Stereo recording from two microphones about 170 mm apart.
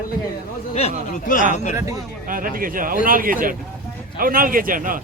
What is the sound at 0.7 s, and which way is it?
Speech, 40° left (ahead or behind).